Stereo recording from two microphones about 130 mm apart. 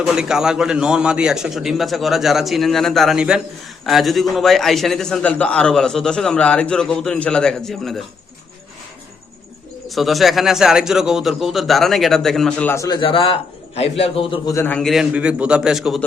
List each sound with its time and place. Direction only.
0.0 s a man's voice: 5° right (ahead or behind)
9.9 s a man's voice: centre (ahead or behind)
12.7 s a man's voice: 25° left (ahead or behind)
13.0 s a man's voice: 40° left (ahead or behind)
14.4 s a man's voice: 25° left (ahead or behind)
14.7 s a man's voice: 5° left (ahead or behind)
15.1 s a man's voice: 10° right (ahead or behind)